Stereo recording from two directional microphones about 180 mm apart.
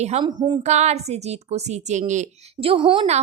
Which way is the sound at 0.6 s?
40° right (ahead or behind).